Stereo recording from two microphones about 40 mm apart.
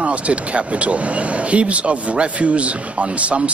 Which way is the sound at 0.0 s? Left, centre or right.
Right.